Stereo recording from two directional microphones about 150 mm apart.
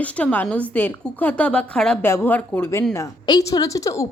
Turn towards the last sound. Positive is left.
turn(degrees=20)  # may be behind; listen again after turning